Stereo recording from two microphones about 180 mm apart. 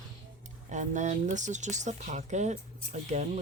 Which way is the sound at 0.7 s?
40° right (ahead or behind).